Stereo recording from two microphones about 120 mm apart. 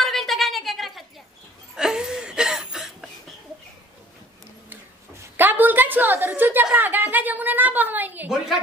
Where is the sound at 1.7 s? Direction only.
5° right (ahead or behind).